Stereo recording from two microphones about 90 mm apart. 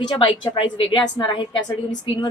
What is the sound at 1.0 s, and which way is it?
Speech, 65° left (ahead or behind).